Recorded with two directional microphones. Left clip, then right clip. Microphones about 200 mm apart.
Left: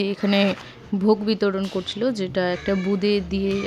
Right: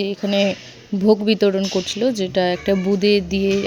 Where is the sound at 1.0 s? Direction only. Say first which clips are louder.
Right 5 dB; 15° right (ahead or behind).